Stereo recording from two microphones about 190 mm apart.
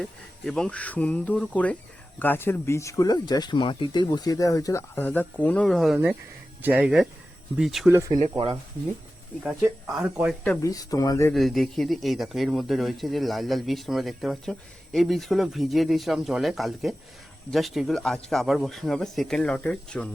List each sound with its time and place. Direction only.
0.0 s speech: 5° left (ahead or behind)
7.9 s speech: 15° right (ahead or behind)
8.2 s speech: 30° right (ahead or behind)
9.6 s speech: 5° right (ahead or behind)
10.4 s speech: 10° left (ahead or behind)
11.3 s speech: centre (ahead or behind)